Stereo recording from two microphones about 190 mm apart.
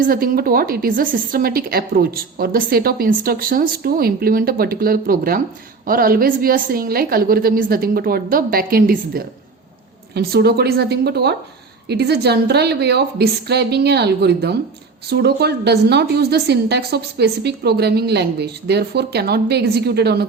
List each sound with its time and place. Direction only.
0.0 s a woman's voice: 50° right (ahead or behind)